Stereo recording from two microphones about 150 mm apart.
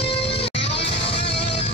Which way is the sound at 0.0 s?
40° left (ahead or behind).